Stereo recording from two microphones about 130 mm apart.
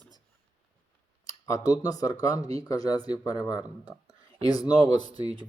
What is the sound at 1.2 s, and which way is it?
Speech, 25° left (ahead or behind).